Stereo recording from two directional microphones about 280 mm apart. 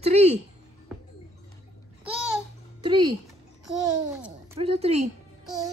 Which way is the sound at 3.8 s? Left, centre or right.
Centre.